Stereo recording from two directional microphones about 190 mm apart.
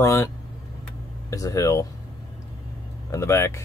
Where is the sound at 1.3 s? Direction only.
15° left (ahead or behind).